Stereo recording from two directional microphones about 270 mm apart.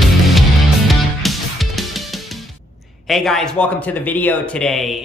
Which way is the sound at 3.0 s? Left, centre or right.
Centre.